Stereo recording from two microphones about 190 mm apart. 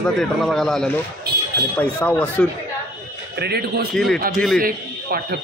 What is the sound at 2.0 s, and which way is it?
Speech, 10° left (ahead or behind).